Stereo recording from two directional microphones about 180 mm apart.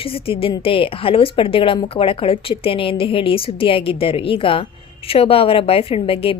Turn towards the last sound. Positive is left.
turn(degrees=30)  # may be behind; listen again after turning